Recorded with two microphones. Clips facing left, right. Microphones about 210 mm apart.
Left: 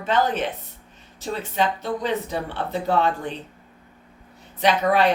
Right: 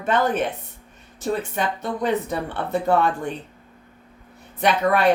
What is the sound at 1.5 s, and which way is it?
Speech, 55° right (ahead or behind).